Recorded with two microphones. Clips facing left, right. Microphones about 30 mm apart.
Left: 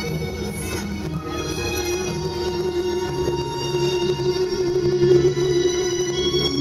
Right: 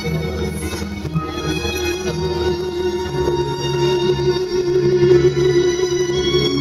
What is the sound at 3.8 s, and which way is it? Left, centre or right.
Organ, right.